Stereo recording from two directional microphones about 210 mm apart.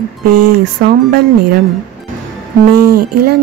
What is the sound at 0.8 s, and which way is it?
Speech, 50° right (ahead or behind).